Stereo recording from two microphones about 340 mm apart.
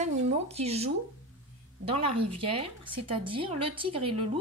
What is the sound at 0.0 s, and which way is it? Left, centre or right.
A woman's voice, centre.